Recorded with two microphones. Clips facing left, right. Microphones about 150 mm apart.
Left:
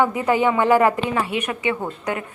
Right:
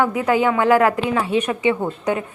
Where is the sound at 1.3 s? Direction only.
25° right (ahead or behind).